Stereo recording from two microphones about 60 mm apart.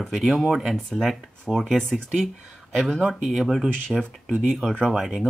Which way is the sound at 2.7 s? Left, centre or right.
Centre.